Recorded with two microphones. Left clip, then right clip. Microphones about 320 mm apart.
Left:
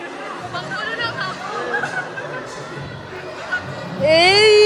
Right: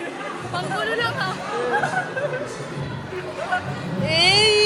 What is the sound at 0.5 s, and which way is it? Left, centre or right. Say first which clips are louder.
Music: right 2 dB; centre.